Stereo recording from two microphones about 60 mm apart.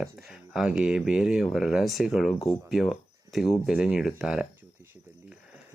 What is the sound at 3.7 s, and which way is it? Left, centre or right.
Speech, centre.